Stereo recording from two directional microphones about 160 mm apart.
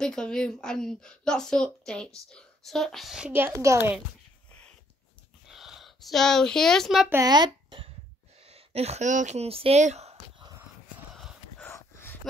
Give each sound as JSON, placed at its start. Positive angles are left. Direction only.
{"t": 0.0, "sound": "a woman's voice", "side_deg": 5}
{"t": 5.5, "sound": "a woman's voice", "side_deg": 0}
{"t": 7.1, "sound": "speech", "side_deg": -20}
{"t": 8.4, "sound": "speech", "side_deg": -40}
{"t": 11.6, "sound": "a sound", "side_deg": 15}